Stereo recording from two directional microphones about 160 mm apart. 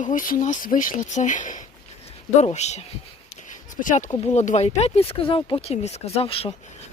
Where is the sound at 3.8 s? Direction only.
55° left (ahead or behind).